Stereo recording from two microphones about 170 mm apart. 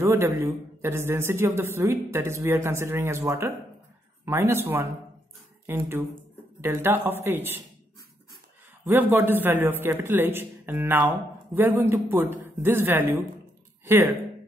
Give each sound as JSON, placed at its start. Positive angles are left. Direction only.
{"t": 0.0, "sound": "a man's voice", "side_deg": -15}
{"t": 8.8, "sound": "a man's voice", "side_deg": -10}